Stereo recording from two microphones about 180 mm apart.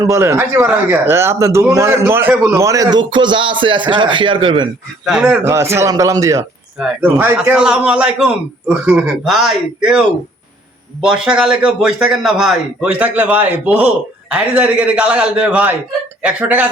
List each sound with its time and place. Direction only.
0.0 s a man's voice: 15° right (ahead or behind)
5.0 s a man's voice: 5° right (ahead or behind)
11.0 s a man's voice: 5° right (ahead or behind)